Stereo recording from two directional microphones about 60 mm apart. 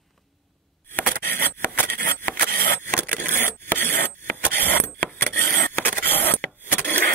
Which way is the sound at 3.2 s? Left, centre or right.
Left.